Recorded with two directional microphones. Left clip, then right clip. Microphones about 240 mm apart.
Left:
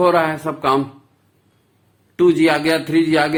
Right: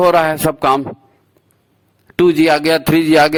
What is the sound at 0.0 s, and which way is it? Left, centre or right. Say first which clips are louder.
Speech: right 4 dB; right.